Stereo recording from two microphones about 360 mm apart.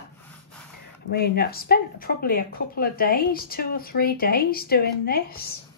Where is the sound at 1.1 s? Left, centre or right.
Left.